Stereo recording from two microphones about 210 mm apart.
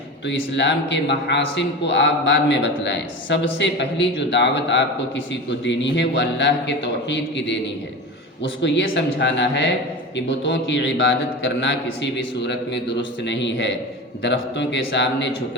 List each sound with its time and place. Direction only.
0.3 s a man's voice: 55° left (ahead or behind)